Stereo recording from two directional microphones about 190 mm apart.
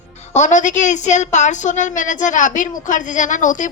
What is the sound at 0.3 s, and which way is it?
A woman's voice, 40° left (ahead or behind).